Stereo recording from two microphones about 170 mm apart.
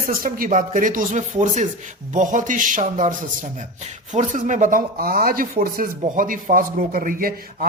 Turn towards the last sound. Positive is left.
turn(degrees=-55)  # may be behind; listen again after turning